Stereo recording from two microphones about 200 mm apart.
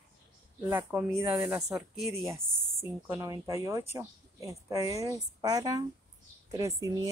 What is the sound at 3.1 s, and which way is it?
A woman's voice, 15° right (ahead or behind).